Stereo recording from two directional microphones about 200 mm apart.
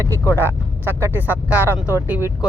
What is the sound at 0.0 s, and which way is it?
Speech, 10° right (ahead or behind).